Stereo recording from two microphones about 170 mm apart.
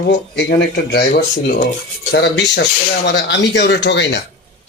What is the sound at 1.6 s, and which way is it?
Speech, 65° left (ahead or behind).